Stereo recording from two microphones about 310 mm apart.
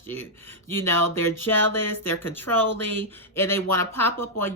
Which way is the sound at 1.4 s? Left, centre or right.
Centre.